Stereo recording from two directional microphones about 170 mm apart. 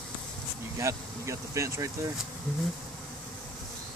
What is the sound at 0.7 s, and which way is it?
Speech, 15° right (ahead or behind).